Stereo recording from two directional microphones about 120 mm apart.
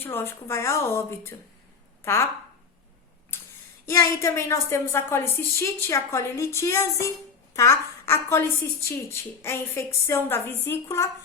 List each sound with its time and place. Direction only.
0.0 s a woman's voice: 15° left (ahead or behind)
3.3 s a woman's voice: 20° left (ahead or behind)